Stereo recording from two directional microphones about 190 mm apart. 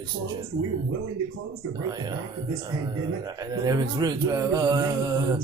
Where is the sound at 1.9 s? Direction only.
20° right (ahead or behind).